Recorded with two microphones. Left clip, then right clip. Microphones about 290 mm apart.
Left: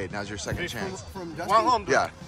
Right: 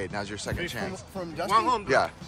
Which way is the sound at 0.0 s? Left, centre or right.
Centre.